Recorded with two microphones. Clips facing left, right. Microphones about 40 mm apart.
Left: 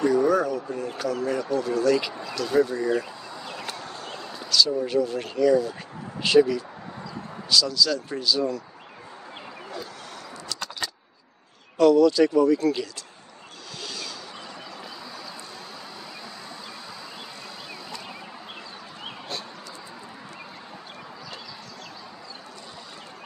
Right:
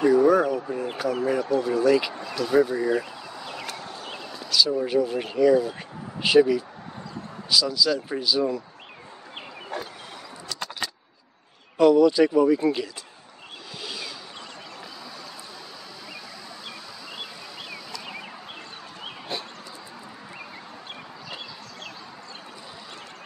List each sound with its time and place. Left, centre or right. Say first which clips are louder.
0.0 s speech: right 3 dB; centre
4.1 s speech: left 1 dB; centre
10.5 s keys jangling: right 1 dB; centre
11.8 s speech: even; centre
13.8 s a sound: right 1 dB; centre